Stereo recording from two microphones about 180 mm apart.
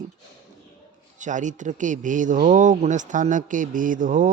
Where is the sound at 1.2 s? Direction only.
45° right (ahead or behind).